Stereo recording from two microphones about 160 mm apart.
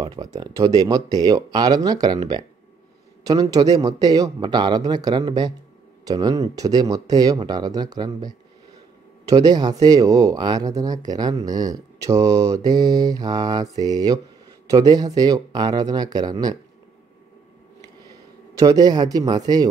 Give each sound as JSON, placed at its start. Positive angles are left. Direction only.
{"t": 0.0, "sound": "mantra", "side_deg": -25}
{"t": 18.6, "sound": "mantra", "side_deg": -25}